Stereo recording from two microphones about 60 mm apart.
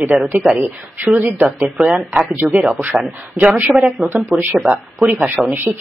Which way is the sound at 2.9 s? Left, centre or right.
Centre.